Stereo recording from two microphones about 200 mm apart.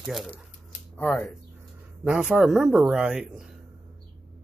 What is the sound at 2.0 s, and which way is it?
Speech, 5° right (ahead or behind).